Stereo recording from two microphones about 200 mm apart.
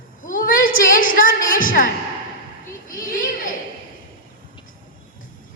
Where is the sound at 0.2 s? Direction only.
45° left (ahead or behind).